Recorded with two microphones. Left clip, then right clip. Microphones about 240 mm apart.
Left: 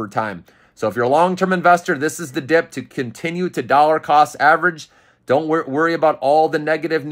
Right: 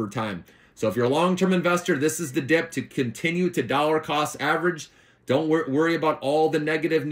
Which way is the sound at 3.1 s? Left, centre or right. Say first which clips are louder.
Left 2 dB; left.